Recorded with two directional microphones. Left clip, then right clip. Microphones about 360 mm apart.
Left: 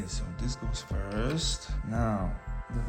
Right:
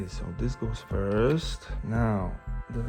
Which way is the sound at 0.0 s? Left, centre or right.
Centre.